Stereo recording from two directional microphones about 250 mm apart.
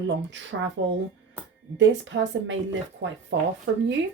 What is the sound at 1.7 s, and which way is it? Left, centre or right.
Speech, right.